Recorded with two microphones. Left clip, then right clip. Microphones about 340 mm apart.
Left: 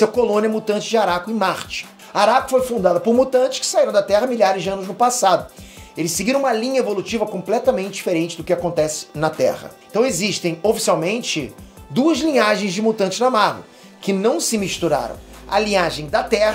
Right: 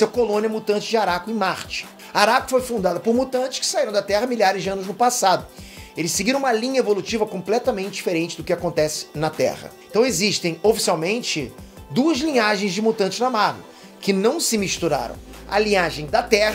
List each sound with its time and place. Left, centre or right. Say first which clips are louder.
0.0 s speech: left 3 dB; centre
0.7 s speech: left 4 dB; right
2.8 s speech: left 5 dB; centre
4.4 s speech: left 2 dB; right